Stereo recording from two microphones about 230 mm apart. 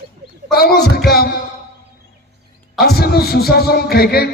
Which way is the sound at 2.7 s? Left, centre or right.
Left.